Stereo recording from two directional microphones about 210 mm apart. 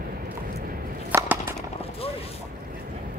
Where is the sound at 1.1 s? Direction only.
10° right (ahead or behind).